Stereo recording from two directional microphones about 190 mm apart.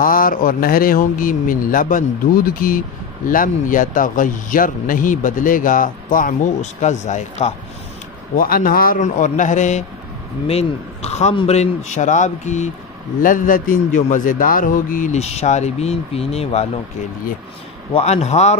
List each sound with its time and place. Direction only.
0.0 s a man's voice: 45° left (ahead or behind)
8.4 s a man's voice: 50° left (ahead or behind); by 16.6 s 35° left (ahead or behind)
17.9 s a man's voice: 35° left (ahead or behind)